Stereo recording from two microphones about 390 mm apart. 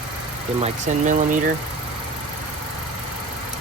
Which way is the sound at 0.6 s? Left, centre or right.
Centre.